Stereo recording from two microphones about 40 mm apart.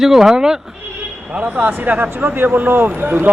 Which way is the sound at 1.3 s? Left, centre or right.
Right.